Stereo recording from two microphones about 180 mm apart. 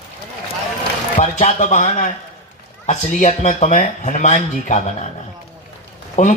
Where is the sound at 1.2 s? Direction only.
40° left (ahead or behind).